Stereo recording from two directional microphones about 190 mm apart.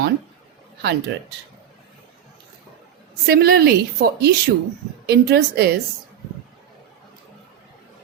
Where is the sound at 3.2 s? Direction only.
55° right (ahead or behind).